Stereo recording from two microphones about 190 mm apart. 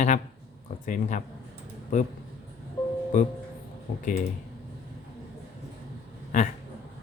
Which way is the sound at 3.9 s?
50° left (ahead or behind).